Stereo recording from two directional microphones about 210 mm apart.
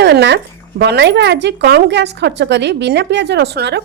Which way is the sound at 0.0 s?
55° right (ahead or behind).